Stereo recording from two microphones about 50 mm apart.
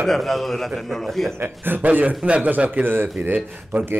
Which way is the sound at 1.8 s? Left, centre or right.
Right.